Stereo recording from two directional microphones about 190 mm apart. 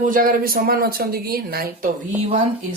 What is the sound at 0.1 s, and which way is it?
Speech, 50° right (ahead or behind).